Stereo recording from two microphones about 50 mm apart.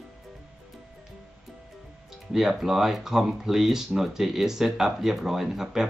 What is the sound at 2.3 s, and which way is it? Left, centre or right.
Speech, centre.